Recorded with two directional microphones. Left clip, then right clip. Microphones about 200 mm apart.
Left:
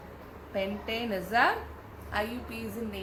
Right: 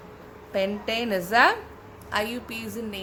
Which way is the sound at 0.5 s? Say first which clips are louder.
Right 6 dB; 60° right (ahead or behind).